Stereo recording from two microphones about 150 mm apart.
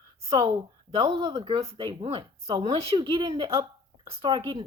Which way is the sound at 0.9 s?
40° right (ahead or behind).